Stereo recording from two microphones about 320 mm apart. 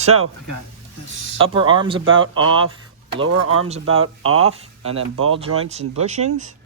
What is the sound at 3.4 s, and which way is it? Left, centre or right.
Speech, right.